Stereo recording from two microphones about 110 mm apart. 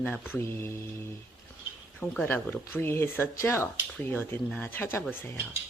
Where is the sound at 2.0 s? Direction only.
15° left (ahead or behind).